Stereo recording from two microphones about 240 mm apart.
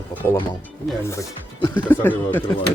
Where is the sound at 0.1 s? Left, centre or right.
Centre.